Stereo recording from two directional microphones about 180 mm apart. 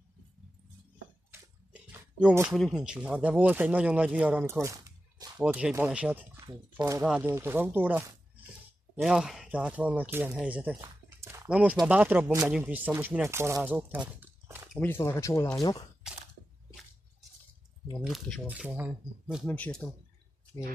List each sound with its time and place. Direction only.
1.3 s a sound: 10° right (ahead or behind)
2.5 s speech: centre (ahead or behind)
6.4 s speech: 25° right (ahead or behind)
7.0 s speech: 5° right (ahead or behind)
14.2 s a sound: 10° right (ahead or behind)
14.8 s speech: 15° left (ahead or behind)
18.0 s speech: centre (ahead or behind)
19.4 s speech: 10° left (ahead or behind)